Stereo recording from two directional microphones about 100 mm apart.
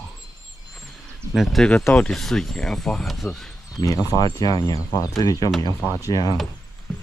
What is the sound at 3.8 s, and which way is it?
Speech, 35° left (ahead or behind).